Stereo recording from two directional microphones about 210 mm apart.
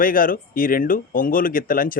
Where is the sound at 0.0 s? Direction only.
40° left (ahead or behind).